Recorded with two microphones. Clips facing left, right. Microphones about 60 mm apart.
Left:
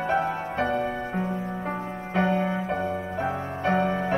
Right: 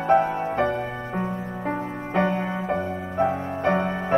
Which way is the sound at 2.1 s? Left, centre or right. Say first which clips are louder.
Even; right.